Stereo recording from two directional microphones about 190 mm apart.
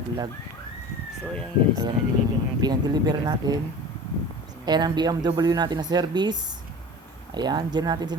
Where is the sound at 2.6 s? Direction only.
20° right (ahead or behind).